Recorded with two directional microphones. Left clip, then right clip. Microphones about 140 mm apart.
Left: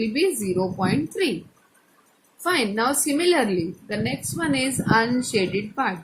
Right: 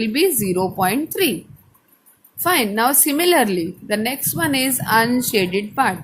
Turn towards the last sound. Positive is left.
turn(degrees=-85)